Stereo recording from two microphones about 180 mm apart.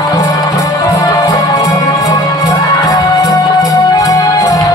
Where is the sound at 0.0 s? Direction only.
20° left (ahead or behind).